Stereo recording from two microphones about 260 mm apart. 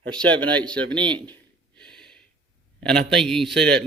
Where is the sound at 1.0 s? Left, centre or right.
Centre.